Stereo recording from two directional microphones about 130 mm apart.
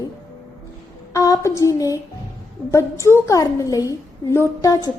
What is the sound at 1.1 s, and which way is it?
A woman's voice, 25° left (ahead or behind).